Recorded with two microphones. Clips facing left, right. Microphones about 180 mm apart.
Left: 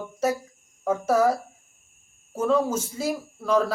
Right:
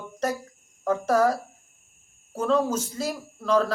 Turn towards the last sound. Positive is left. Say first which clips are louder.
# even
turn(degrees=10)  # may be behind; listen again after turning